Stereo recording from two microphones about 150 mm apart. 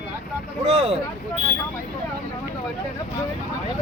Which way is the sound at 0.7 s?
40° right (ahead or behind).